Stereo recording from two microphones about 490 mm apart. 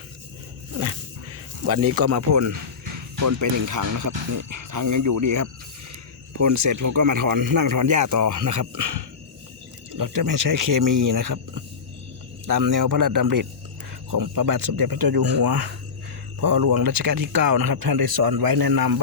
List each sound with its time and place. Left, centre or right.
1.6 s speech: right
2.5 s a sound: right
3.2 s speech: right